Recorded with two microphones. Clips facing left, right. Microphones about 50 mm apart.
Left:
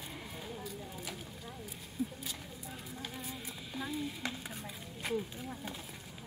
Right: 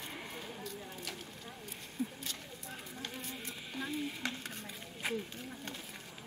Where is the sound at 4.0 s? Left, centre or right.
Centre.